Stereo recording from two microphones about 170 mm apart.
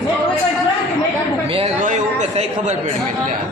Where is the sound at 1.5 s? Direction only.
30° right (ahead or behind).